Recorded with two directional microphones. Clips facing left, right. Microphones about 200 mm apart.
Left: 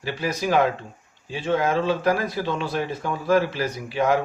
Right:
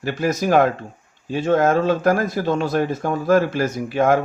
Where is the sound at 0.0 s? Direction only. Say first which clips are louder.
Right 5 dB; 45° right (ahead or behind).